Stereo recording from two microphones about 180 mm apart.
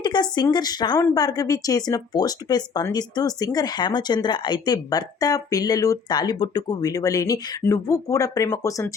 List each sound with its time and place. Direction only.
0.0 s speech: 25° left (ahead or behind)